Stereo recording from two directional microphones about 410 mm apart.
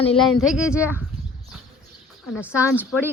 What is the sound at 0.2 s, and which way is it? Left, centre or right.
Speech, centre.